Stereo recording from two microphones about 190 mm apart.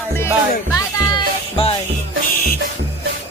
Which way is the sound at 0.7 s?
20° left (ahead or behind).